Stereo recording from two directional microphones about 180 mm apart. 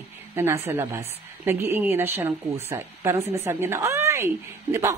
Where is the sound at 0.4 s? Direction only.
15° right (ahead or behind).